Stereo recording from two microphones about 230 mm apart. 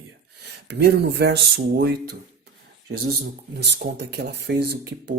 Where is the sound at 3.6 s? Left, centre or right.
Right.